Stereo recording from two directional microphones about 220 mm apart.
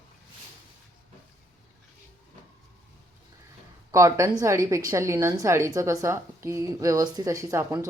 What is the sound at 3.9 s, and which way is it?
A woman's voice, 15° right (ahead or behind).